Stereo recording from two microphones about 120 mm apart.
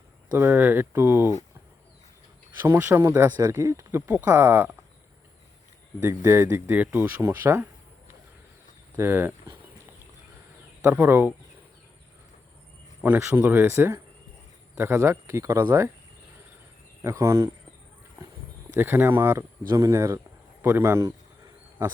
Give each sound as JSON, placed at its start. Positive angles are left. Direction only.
{"t": 0.3, "sound": "speech", "side_deg": -20}
{"t": 2.6, "sound": "speech", "side_deg": -20}
{"t": 4.0, "sound": "speech", "side_deg": -15}
{"t": 6.0, "sound": "a man's voice", "side_deg": -20}
{"t": 10.8, "sound": "a man's voice", "side_deg": -15}
{"t": 13.0, "sound": "a man's voice", "side_deg": -15}
{"t": 17.0, "sound": "speech", "side_deg": -25}
{"t": 18.2, "sound": "a sound", "side_deg": -20}
{"t": 18.8, "sound": "speech", "side_deg": -20}